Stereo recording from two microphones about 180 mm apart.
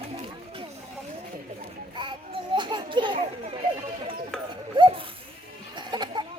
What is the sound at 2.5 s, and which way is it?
Children playing, 25° right (ahead or behind).